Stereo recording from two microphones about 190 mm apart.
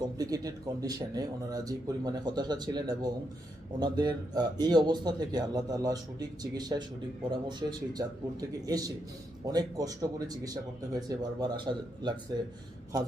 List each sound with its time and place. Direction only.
0.2 s a man's voice: 20° right (ahead or behind)